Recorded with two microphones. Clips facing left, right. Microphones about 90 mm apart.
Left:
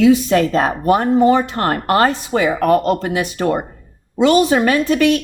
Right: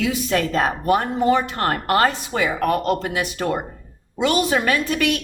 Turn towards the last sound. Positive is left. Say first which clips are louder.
# left 6 dB
turn(degrees=30)  # may be behind; listen again after turning